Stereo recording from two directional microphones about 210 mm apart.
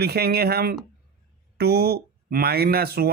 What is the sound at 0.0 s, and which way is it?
Speech, 50° right (ahead or behind).